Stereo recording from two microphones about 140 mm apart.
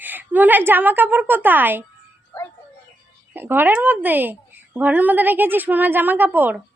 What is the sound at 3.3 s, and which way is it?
A woman's voice, 15° right (ahead or behind).